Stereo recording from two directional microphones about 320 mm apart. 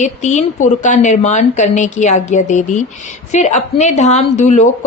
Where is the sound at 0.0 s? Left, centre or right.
Left.